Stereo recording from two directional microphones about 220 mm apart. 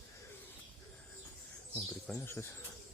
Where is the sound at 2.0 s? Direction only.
5° left (ahead or behind).